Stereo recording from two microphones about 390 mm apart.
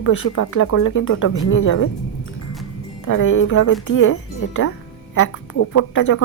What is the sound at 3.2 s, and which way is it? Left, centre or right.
Speech, left.